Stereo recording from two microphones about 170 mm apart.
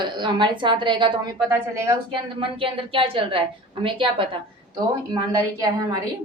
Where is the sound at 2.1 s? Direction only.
30° right (ahead or behind).